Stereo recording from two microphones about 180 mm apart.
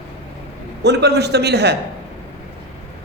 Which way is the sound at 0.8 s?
65° right (ahead or behind).